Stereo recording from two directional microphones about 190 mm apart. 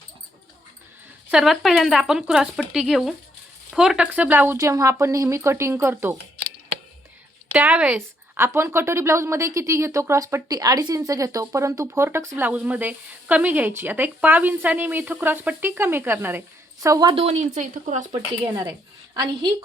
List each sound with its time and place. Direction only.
1.3 s speech: centre (ahead or behind)
7.5 s a woman's voice: 10° right (ahead or behind); by 18.1 s 40° right (ahead or behind)
18.1 s a woman's voice: 15° right (ahead or behind)